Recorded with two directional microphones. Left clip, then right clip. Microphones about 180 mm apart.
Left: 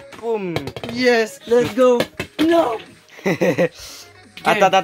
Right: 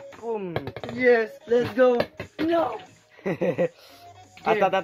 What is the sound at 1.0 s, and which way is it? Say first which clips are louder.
Speech: left 3 dB; 55° left (ahead or behind).